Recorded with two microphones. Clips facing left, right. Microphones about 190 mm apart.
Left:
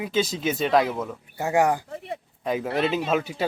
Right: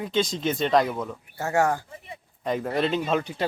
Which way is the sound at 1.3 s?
15° left (ahead or behind).